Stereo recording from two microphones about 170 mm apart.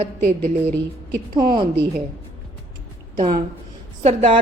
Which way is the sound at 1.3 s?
25° right (ahead or behind).